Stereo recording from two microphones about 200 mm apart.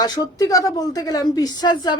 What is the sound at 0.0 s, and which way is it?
A woman's voice, 20° left (ahead or behind).